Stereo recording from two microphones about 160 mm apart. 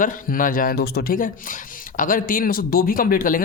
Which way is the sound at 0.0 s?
55° left (ahead or behind).